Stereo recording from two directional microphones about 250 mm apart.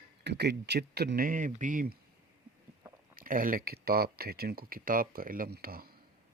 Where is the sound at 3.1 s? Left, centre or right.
Right.